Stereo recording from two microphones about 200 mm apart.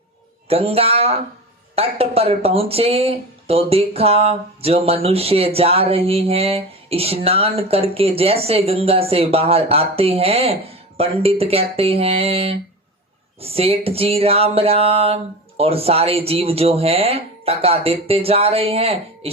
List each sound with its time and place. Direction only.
0.4 s speech: 30° right (ahead or behind)